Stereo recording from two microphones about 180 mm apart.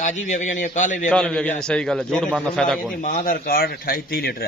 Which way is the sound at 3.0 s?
50° left (ahead or behind).